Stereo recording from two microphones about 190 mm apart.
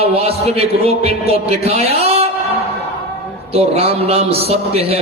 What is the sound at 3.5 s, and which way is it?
Mantra, 30° right (ahead or behind).